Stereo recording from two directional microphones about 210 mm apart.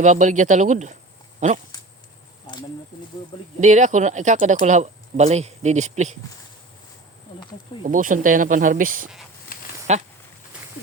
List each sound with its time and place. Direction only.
0.0 s speech: 35° right (ahead or behind)
3.6 s speech: 35° right (ahead or behind)
7.9 s speech: 40° right (ahead or behind)